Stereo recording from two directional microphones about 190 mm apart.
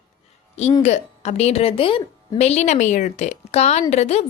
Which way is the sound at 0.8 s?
35° left (ahead or behind).